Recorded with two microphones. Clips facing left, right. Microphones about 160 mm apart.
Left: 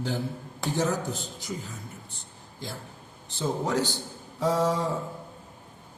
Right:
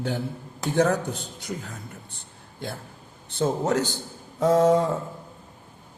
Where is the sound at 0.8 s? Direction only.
65° right (ahead or behind).